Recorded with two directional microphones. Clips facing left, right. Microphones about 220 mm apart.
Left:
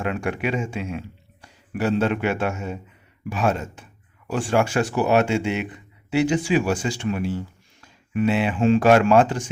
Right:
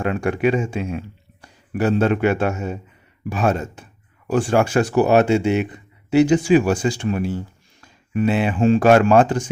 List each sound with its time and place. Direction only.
0.0 s speech: 40° right (ahead or behind)